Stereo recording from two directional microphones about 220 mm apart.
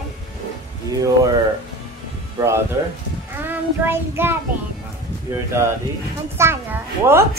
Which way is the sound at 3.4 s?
10° right (ahead or behind).